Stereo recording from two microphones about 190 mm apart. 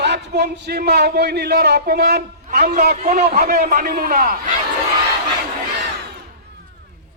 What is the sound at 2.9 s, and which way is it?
A man's voice, 40° right (ahead or behind).